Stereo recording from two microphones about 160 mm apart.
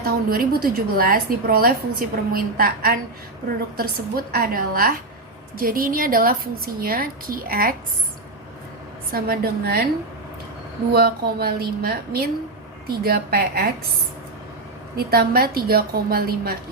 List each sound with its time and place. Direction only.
0.0 s a woman's voice: 70° right (ahead or behind)
9.1 s a woman's voice: 70° right (ahead or behind)
10.9 s a woman's voice: 70° right (ahead or behind)
14.9 s a woman's voice: 70° right (ahead or behind)